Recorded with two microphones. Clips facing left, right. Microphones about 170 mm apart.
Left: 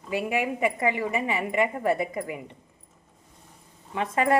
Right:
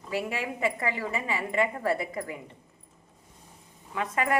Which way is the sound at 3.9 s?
25° left (ahead or behind).